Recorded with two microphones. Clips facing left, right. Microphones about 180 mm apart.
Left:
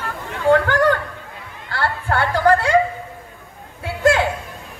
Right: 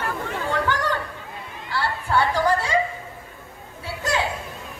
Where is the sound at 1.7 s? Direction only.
55° left (ahead or behind).